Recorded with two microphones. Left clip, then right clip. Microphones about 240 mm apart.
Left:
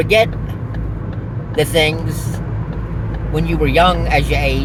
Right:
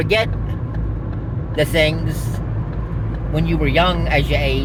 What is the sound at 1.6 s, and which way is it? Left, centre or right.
Speech, left.